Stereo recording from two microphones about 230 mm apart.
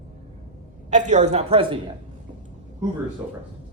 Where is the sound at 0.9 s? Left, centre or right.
Right.